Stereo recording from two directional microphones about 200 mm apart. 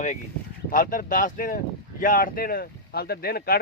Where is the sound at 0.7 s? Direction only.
40° left (ahead or behind).